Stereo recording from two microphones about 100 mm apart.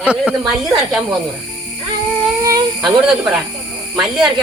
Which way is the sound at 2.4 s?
35° right (ahead or behind).